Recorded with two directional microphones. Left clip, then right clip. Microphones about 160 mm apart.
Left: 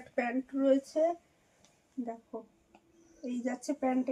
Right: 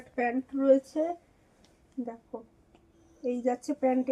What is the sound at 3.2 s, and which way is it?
Speech, 25° left (ahead or behind).